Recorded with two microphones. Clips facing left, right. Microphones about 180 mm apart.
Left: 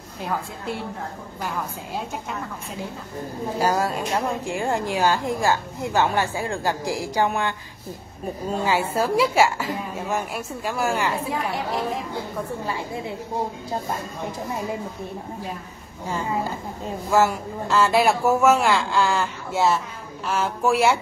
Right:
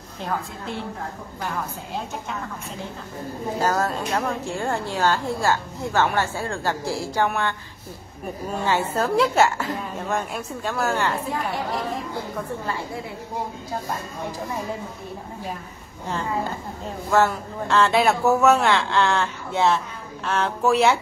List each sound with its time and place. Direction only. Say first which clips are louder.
3.5 s a woman's voice: left 1 dB; 10° left (ahead or behind)
8.9 s a woman's voice: even; 10° left (ahead or behind)
12.6 s a woman's voice: even; 15° left (ahead or behind)
17.1 s a woman's voice: even; 10° left (ahead or behind)